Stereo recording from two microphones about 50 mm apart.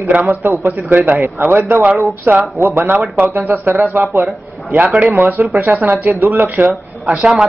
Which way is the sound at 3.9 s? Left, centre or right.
Right.